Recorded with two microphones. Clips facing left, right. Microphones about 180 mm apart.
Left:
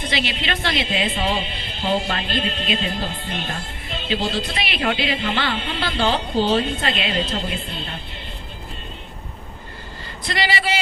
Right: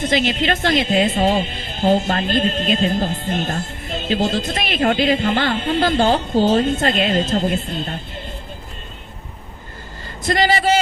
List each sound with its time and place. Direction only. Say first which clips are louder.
0.0 s speech: right 7 dB; 45° right (ahead or behind)
10.2 s speech: right 7 dB; 45° right (ahead or behind)